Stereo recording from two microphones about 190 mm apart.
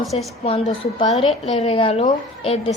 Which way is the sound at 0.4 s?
30° left (ahead or behind).